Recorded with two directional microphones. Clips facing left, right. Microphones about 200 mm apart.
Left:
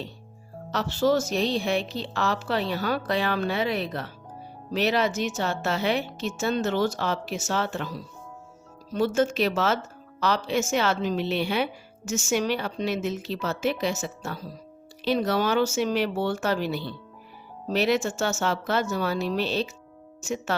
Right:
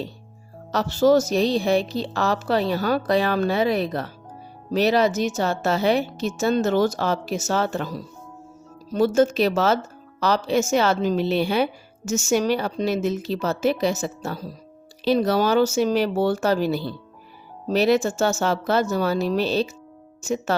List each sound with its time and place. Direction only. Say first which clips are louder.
0.7 s speech: right 6 dB; 40° right (ahead or behind)